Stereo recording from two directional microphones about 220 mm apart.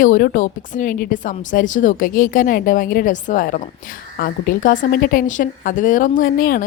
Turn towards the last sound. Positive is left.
turn(degrees=40)  # may be behind; listen again after turning